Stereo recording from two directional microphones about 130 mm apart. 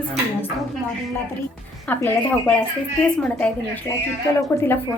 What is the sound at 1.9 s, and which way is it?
A woman's voice, 15° left (ahead or behind).